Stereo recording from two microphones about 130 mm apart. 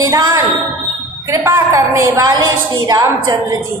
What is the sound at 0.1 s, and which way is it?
A woman's voice, 25° right (ahead or behind).